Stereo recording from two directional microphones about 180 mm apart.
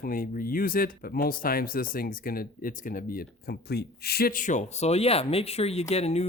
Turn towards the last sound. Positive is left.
turn(degrees=35)  # may be behind; listen again after turning